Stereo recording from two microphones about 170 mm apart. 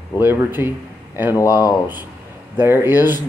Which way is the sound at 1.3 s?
20° left (ahead or behind).